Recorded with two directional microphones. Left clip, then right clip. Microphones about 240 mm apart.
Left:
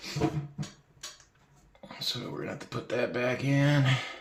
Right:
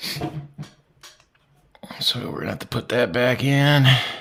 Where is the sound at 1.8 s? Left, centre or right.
Right.